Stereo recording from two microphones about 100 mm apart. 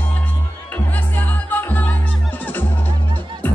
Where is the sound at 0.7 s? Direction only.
20° left (ahead or behind).